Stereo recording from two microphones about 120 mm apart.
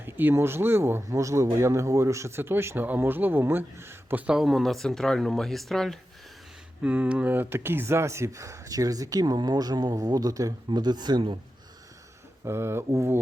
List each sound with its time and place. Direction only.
0.0 s speech: 15° right (ahead or behind)
4.3 s speech: 5° right (ahead or behind)
6.8 s speech: 10° right (ahead or behind); by 11.3 s 40° right (ahead or behind)
12.5 s speech: 20° right (ahead or behind)